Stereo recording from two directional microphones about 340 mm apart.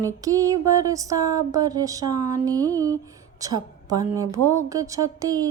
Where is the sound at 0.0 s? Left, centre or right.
Centre.